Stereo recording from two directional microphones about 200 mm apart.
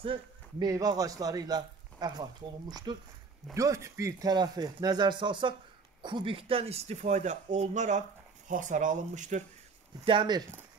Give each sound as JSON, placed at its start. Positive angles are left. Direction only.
{"t": 0.0, "sound": "speech", "side_deg": -25}
{"t": 10.0, "sound": "speech", "side_deg": -25}